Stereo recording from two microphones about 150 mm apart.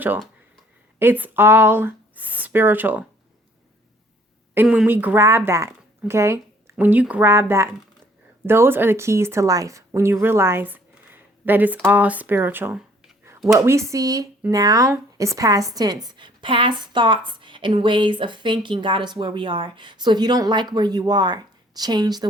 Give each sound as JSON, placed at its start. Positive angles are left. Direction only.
{"t": 0.9, "sound": "speech", "side_deg": -15}
{"t": 4.5, "sound": "a woman's voice", "side_deg": -10}